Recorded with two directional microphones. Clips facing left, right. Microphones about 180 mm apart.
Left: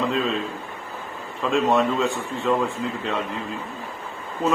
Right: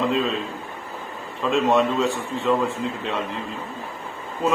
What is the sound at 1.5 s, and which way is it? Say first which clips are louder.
A man's voice: right 1 dB; centre (ahead or behind).